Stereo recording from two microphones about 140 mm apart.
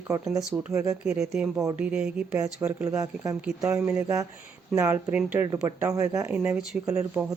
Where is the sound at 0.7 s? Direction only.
25° right (ahead or behind).